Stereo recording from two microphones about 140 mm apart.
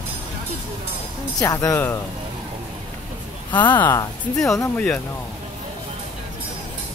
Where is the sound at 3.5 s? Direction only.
15° left (ahead or behind).